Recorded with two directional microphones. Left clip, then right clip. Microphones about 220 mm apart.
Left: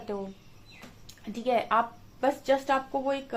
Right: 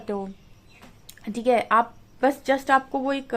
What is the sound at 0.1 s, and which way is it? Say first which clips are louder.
A woman's voice: right 5 dB; 45° right (ahead or behind).